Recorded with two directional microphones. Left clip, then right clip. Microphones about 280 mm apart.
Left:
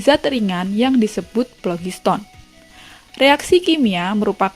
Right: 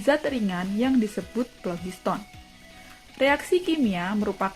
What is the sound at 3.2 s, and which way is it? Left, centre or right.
A woman's voice, left.